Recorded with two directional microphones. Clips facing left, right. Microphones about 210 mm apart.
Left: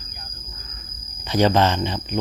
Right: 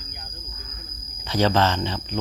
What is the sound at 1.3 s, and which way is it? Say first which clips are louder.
Speech: left 3 dB; 15° left (ahead or behind).